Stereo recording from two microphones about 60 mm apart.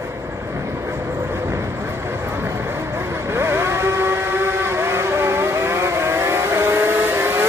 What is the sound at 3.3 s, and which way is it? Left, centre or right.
Vehicle, right.